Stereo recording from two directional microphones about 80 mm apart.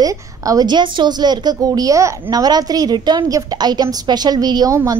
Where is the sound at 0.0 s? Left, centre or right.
Right.